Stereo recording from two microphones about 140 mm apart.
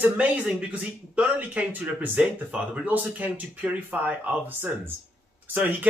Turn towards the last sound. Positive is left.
turn(degrees=-10)  # may be behind; listen again after turning